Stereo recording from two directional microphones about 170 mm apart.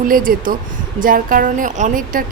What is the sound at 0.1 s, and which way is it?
A woman's voice, 55° right (ahead or behind).